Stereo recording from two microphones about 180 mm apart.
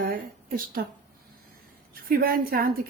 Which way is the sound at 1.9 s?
55° right (ahead or behind).